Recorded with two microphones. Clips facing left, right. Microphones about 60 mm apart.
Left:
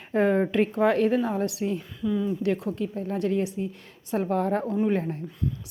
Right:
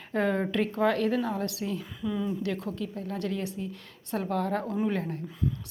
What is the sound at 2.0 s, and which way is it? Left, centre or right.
Speech, centre.